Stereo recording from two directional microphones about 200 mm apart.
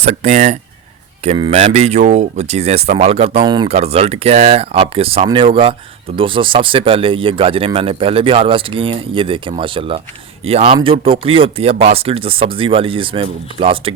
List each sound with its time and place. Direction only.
0.0 s speech: 35° right (ahead or behind)